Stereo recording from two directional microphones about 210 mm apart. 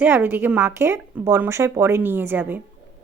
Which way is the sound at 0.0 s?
10° right (ahead or behind).